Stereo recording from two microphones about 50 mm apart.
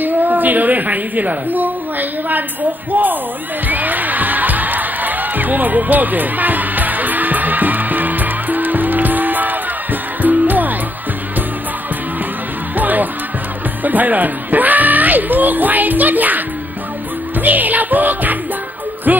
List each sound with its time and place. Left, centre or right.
0.0 s a woman's voice: right
3.6 s music: right
12.7 s music: right
13.8 s speech: right
19.1 s music: right